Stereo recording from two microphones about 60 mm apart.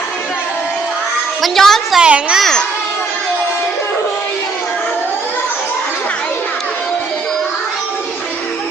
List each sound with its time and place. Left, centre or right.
1.4 s a woman's voice: centre
2.0 s a child's voice: centre
2.4 s a child's voice: centre